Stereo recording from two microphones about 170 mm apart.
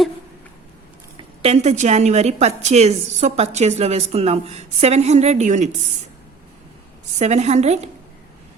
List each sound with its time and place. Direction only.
1.1 s a woman's voice: 35° right (ahead or behind)
7.2 s a woman's voice: 40° right (ahead or behind)